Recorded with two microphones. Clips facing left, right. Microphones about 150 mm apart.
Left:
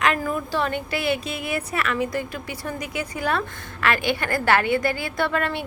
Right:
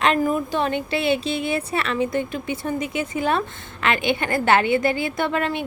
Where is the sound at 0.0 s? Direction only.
25° right (ahead or behind).